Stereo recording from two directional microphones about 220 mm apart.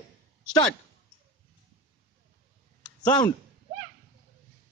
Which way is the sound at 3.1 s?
20° left (ahead or behind).